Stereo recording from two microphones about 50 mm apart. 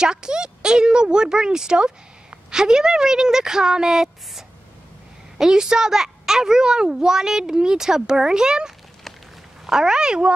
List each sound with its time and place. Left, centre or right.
0.0 s a child's voice: centre